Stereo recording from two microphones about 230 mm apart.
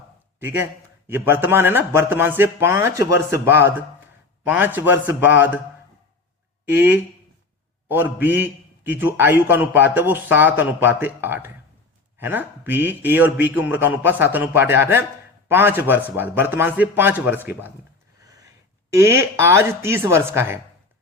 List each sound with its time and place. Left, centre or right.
0.3 s a man's voice: centre
6.7 s a man's voice: centre
18.9 s a man's voice: centre